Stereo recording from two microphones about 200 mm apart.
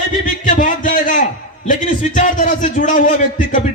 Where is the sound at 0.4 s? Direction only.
40° left (ahead or behind).